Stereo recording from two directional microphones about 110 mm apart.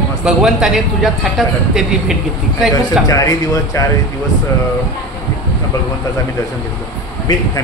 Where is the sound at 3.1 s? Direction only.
30° left (ahead or behind).